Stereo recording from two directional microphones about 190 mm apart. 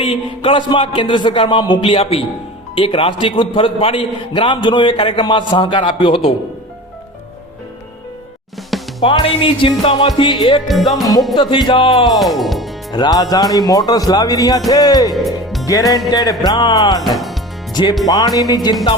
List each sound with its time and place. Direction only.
0.0 s a man's voice: 25° left (ahead or behind)
8.7 s music: centre (ahead or behind)
9.0 s a man's voice: 25° left (ahead or behind)
10.7 s music: centre (ahead or behind)
11.3 s a man's voice: 25° left (ahead or behind)
12.1 s music: centre (ahead or behind)
12.9 s a man's voice: 20° left (ahead or behind)
15.1 s music: centre (ahead or behind)
15.6 s music: 20° left (ahead or behind)
16.0 s a man's voice: 20° left (ahead or behind)